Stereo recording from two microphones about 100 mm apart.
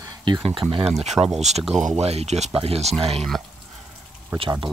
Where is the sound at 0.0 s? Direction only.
45° right (ahead or behind).